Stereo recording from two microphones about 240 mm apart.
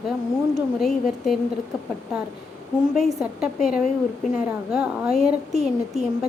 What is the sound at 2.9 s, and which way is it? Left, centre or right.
A woman's voice, centre.